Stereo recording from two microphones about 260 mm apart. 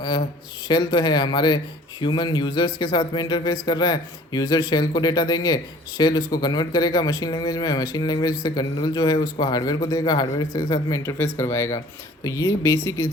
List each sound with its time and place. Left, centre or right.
0.7 s speech: centre